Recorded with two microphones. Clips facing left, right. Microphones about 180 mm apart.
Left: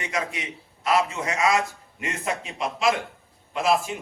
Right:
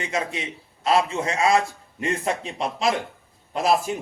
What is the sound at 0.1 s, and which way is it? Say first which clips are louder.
A man's voice: right 2 dB; 25° right (ahead or behind).